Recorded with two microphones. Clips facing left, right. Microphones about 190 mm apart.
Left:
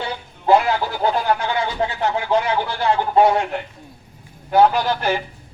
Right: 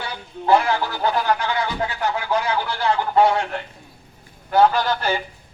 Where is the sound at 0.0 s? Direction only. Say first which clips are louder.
Left 2 dB; 20° left (ahead or behind).